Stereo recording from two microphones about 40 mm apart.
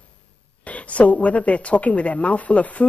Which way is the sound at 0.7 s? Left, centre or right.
Left.